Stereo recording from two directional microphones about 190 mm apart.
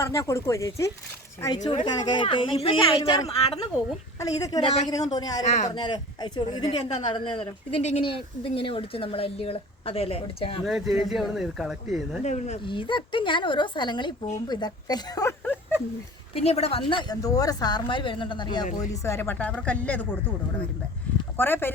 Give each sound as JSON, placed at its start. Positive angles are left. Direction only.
{"t": 0.0, "sound": "speech", "side_deg": 15}
{"t": 4.2, "sound": "speech", "side_deg": 20}
{"t": 5.4, "sound": "a woman's voice", "side_deg": 40}
{"t": 5.7, "sound": "speech", "side_deg": 25}
{"t": 10.7, "sound": "speech", "side_deg": 0}
{"t": 12.2, "sound": "speech", "side_deg": 35}
{"t": 16.3, "sound": "a woman's voice", "side_deg": 30}
{"t": 16.9, "sound": "speech", "side_deg": 20}
{"t": 19.0, "sound": "speech", "side_deg": 15}
{"t": 21.3, "sound": "speech", "side_deg": 10}